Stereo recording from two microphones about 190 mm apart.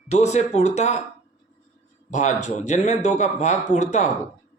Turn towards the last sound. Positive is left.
turn(degrees=40)  # may be behind; listen again after turning